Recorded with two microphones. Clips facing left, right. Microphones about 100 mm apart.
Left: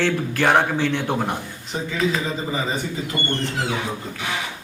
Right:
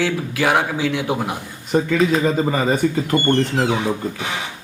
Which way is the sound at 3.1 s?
30° right (ahead or behind).